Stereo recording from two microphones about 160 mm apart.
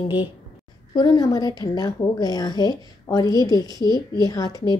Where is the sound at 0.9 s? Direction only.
25° left (ahead or behind).